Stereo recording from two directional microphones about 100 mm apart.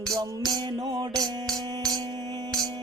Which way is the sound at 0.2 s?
40° right (ahead or behind).